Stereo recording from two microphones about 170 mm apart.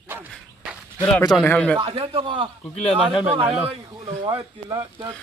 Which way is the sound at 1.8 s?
35° right (ahead or behind).